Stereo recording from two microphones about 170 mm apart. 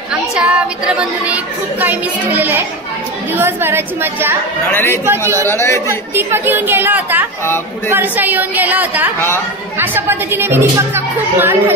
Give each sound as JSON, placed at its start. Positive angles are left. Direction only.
{"t": 0.1, "sound": "a woman's voice", "side_deg": -5}
{"t": 4.6, "sound": "speech", "side_deg": 15}
{"t": 5.0, "sound": "a woman's voice", "side_deg": -15}
{"t": 5.5, "sound": "speech", "side_deg": 15}
{"t": 5.9, "sound": "a woman's voice", "side_deg": -15}